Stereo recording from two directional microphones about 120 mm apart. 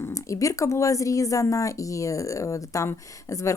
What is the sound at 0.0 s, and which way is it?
Speech, 25° left (ahead or behind).